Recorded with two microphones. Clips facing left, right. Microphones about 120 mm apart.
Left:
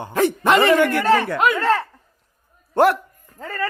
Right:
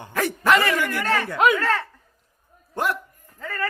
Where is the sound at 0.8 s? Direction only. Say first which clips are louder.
Left 8 dB; 65° left (ahead or behind).